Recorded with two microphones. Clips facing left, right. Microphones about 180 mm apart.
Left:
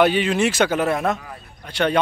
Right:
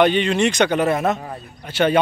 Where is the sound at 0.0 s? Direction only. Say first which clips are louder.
Right 1 dB; 5° left (ahead or behind).